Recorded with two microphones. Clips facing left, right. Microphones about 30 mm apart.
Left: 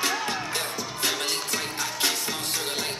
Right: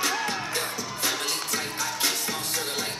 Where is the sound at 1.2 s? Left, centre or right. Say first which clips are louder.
Left 1 dB; left.